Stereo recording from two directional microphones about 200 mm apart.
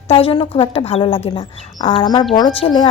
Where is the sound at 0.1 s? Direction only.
30° left (ahead or behind).